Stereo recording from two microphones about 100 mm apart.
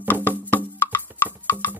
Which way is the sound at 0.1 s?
20° left (ahead or behind).